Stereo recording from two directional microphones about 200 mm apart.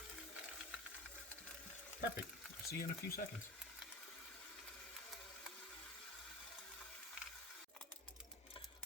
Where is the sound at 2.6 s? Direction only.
45° left (ahead or behind).